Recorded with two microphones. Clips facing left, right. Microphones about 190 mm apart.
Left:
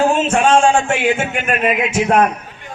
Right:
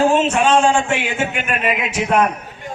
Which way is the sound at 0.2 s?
50° left (ahead or behind).